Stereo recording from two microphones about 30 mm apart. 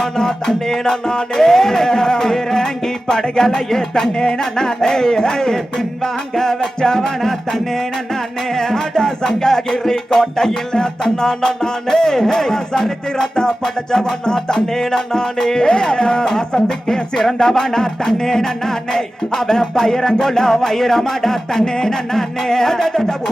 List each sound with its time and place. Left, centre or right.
0.0 s music: centre
4.4 s speech: centre
5.7 s music: centre
10.5 s music: left